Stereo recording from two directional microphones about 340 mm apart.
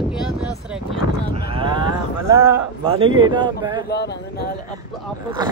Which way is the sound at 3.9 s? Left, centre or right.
Left.